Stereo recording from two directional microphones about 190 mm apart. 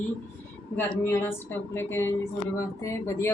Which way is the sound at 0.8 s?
10° left (ahead or behind).